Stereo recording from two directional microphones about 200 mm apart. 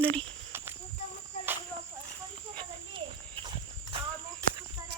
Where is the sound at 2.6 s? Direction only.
25° right (ahead or behind).